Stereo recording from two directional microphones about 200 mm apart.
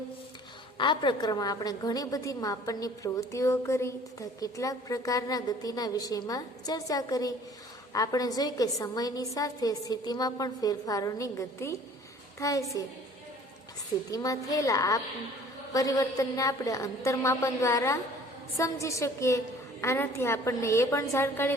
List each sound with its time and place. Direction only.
0.8 s a woman's voice: 20° left (ahead or behind)
14.1 s a woman's voice: 15° left (ahead or behind)